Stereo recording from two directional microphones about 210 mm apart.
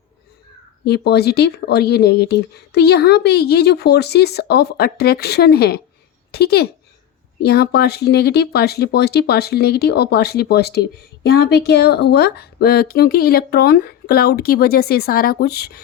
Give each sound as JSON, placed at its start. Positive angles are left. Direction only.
{"t": 0.9, "sound": "speech", "side_deg": 50}